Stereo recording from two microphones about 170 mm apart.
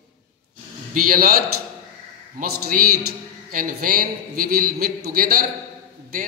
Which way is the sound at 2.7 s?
55° right (ahead or behind).